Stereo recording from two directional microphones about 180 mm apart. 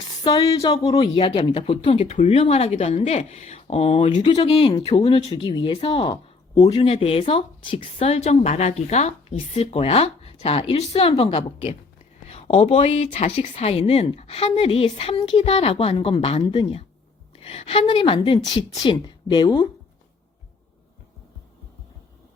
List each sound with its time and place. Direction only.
0.3 s a woman's voice: 20° left (ahead or behind)